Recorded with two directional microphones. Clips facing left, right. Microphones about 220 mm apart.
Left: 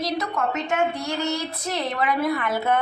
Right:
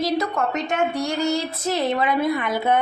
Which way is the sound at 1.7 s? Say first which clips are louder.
Right 4 dB; 25° right (ahead or behind).